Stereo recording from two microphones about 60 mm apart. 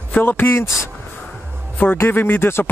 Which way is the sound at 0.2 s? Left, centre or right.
Left.